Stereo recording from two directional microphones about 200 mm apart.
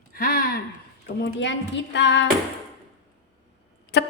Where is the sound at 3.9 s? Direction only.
55° left (ahead or behind).